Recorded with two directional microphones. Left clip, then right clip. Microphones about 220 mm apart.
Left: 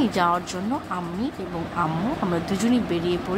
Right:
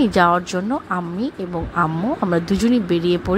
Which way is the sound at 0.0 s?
30° right (ahead or behind).